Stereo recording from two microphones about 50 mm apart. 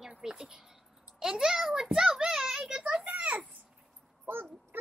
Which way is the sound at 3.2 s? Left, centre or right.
Right.